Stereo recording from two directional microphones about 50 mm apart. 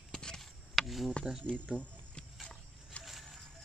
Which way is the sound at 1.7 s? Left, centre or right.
Centre.